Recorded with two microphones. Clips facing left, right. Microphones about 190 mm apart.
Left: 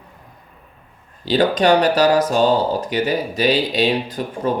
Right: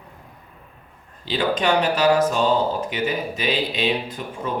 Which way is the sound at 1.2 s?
40° left (ahead or behind).